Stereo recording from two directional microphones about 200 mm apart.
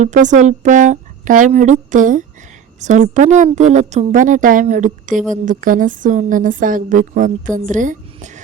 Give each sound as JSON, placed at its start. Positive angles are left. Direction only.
{"t": 0.0, "sound": "a woman's voice", "side_deg": -40}